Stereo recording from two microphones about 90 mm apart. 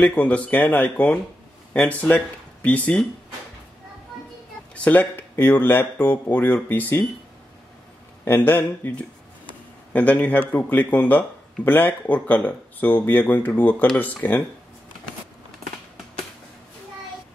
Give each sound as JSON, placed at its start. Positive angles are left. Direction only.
{"t": 0.0, "sound": "speech", "side_deg": 15}
{"t": 4.7, "sound": "speech", "side_deg": 20}
{"t": 8.3, "sound": "speech", "side_deg": 20}
{"t": 9.5, "sound": "a sound", "side_deg": 15}
{"t": 10.5, "sound": "speech", "side_deg": 15}